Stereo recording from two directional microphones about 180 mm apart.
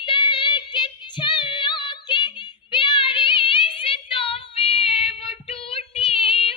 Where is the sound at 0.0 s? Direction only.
25° left (ahead or behind).